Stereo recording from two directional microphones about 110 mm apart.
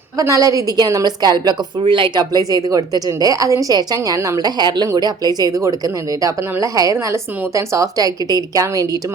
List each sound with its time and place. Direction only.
0.2 s a woman's voice: 30° right (ahead or behind)